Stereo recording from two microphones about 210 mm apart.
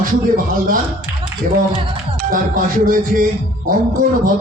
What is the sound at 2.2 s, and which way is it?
A man's voice, 40° right (ahead or behind).